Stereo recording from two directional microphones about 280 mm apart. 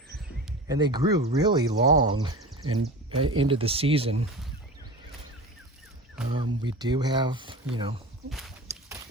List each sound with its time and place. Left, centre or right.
0.7 s speech: centre
6.3 s speech: centre
8.3 s walk: centre